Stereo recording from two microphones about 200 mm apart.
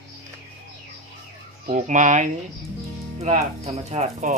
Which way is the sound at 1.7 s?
40° right (ahead or behind).